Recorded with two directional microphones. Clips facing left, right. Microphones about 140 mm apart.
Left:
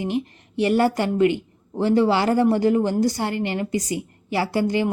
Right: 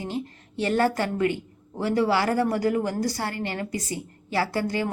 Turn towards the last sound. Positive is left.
turn(degrees=20)  # may be behind; listen again after turning